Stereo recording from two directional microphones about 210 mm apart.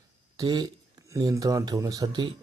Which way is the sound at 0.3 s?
20° right (ahead or behind).